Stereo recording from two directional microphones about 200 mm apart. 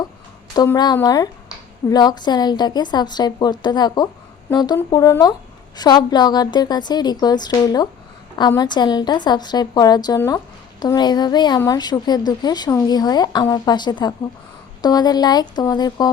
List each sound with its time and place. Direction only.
0.5 s a woman's voice: 20° left (ahead or behind)